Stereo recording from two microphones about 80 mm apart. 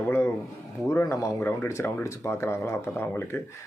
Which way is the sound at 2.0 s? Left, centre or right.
Left.